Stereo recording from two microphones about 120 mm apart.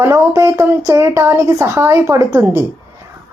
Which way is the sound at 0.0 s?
25° right (ahead or behind).